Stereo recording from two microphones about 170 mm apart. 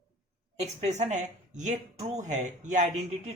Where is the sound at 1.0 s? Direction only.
45° right (ahead or behind).